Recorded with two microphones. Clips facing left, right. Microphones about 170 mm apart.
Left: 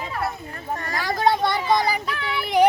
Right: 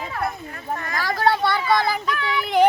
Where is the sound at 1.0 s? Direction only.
20° left (ahead or behind).